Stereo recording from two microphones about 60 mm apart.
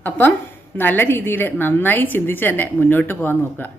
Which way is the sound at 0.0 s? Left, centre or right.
Left.